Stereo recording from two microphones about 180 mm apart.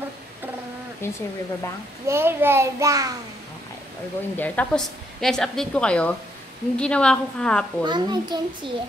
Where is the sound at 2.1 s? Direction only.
10° right (ahead or behind).